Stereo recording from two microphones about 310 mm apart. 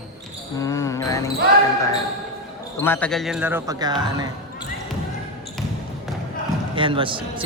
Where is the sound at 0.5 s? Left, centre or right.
Centre.